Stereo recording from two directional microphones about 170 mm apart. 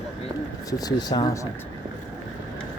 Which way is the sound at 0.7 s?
20° left (ahead or behind).